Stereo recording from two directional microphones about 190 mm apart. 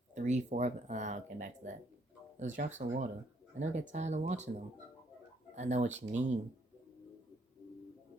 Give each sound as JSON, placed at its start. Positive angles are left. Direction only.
{"t": 0.1, "sound": "speech", "side_deg": -40}